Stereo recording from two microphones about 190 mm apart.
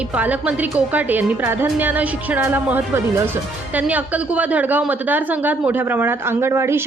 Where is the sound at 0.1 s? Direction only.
5° right (ahead or behind).